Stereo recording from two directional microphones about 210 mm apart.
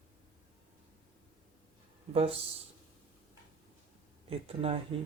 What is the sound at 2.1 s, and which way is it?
Speech, 25° right (ahead or behind).